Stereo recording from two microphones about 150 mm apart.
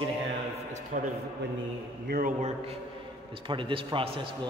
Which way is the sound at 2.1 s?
70° right (ahead or behind).